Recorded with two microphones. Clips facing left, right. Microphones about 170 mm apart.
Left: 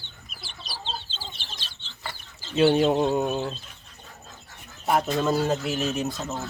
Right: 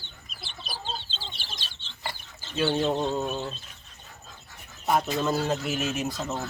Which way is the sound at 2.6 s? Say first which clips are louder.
Left 6 dB; 20° left (ahead or behind).